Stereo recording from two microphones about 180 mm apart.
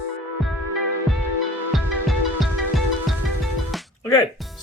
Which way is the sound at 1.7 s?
Centre (ahead or behind).